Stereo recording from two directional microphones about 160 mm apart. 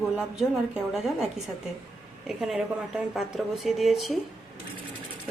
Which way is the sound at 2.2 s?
5° right (ahead or behind).